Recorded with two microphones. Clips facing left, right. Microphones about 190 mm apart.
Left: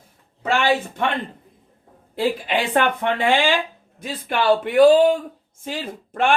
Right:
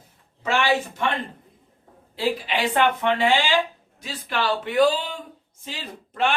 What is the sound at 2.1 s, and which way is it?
Speech, 50° left (ahead or behind).